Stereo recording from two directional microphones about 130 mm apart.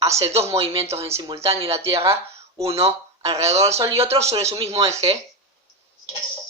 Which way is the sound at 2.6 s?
50° right (ahead or behind).